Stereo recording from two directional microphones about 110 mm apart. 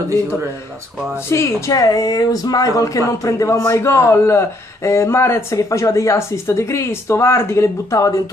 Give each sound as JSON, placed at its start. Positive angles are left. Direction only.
{"t": 1.3, "sound": "speech", "side_deg": 30}